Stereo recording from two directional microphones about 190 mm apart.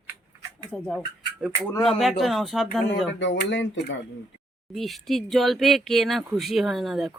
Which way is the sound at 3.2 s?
70° left (ahead or behind).